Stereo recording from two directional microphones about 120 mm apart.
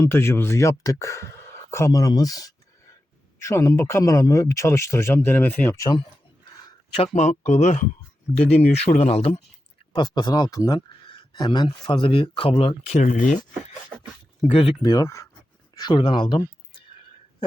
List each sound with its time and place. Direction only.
0.0 s speech: 20° left (ahead or behind)
5.7 s speech: 25° left (ahead or behind)
6.9 s speech: 60° left (ahead or behind)
8.4 s speech: 60° left (ahead or behind)
9.9 s speech: 40° left (ahead or behind); by 13.4 s 90° left
13.9 s speech: 10° right (ahead or behind)
14.4 s speech: 50° left (ahead or behind)
14.8 s speech: 35° left (ahead or behind)
15.7 s speech: 35° left (ahead or behind)